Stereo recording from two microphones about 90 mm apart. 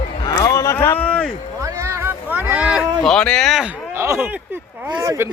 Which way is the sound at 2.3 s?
20° right (ahead or behind).